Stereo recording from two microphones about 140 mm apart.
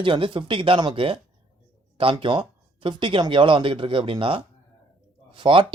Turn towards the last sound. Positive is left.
turn(degrees=-35)  # may be behind; listen again after turning